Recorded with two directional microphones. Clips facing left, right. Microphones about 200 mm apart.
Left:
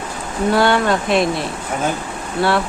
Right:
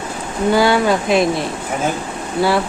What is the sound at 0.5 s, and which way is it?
Speech, centre (ahead or behind).